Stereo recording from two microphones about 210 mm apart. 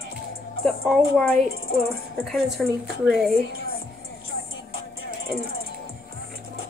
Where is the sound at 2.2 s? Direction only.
Centre (ahead or behind).